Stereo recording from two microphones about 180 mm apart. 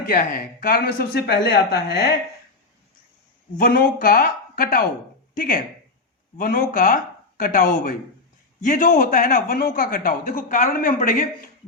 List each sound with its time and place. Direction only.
0.0 s speech: 50° left (ahead or behind)
3.6 s speech: 55° left (ahead or behind)